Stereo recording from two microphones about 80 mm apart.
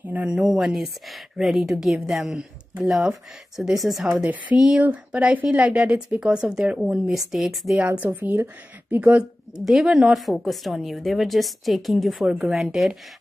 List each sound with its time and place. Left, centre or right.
0.0 s a sound: right
0.3 s a woman's voice: centre
4.7 s a woman's voice: centre
8.0 s speech: right
9.7 s a woman's voice: centre